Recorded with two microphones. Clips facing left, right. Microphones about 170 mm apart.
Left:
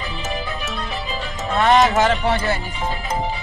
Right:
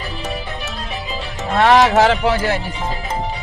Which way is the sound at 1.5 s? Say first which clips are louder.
Right 3 dB; 70° right (ahead or behind).